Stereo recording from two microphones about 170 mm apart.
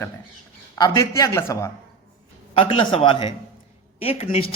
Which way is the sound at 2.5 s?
30° left (ahead or behind).